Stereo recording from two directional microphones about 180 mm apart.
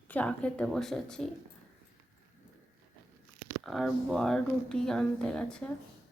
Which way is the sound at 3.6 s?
Centre (ahead or behind).